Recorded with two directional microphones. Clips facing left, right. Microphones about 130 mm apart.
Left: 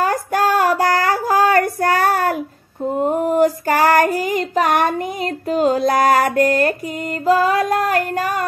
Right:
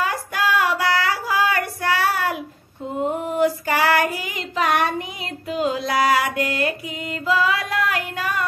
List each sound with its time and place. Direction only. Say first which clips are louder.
0.0 s female singing: left 6 dB; 45° left (ahead or behind)
2.8 s child singing: left 6 dB; 45° left (ahead or behind)
7.2 s music: left 6 dB; 45° left (ahead or behind)